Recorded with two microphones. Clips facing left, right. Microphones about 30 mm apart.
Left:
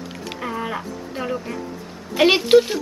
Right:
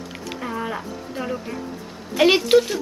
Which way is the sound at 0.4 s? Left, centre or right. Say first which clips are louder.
Left 1 dB; centre.